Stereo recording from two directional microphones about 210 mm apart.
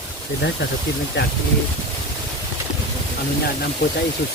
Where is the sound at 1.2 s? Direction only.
60° left (ahead or behind).